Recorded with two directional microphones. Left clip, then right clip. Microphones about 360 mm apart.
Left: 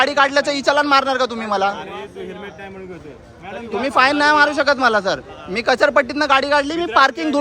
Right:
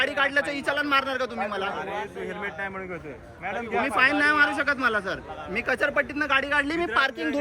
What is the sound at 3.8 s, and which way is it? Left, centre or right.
A man's voice, centre.